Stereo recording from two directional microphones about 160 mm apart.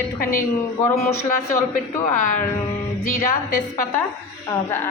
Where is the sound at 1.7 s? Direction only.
55° left (ahead or behind).